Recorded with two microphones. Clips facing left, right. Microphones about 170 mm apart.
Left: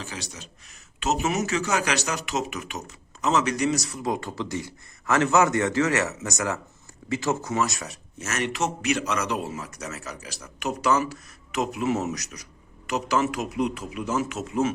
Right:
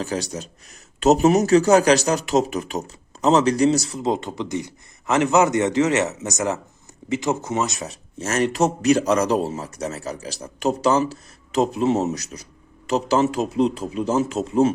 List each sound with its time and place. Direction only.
0.0 s a man's voice: 40° right (ahead or behind)